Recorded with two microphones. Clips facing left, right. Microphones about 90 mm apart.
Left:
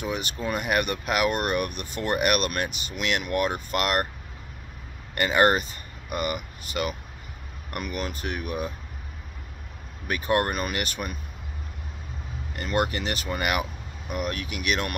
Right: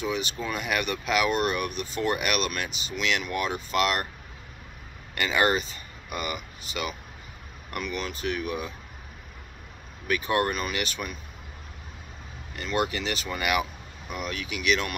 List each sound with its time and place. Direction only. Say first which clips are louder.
0.0 s speech: even; 50° left (ahead or behind)
5.1 s speech: left 3 dB; 45° left (ahead or behind)
10.0 s speech: left 1 dB; 45° left (ahead or behind)
12.5 s speech: left 1 dB; 45° left (ahead or behind)